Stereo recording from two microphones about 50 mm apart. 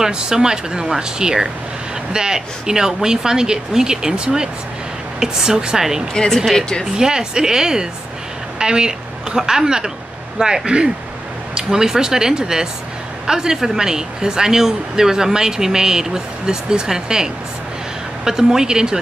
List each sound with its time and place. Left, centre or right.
0.0 s speech: centre
6.1 s speech: centre
7.0 s speech: centre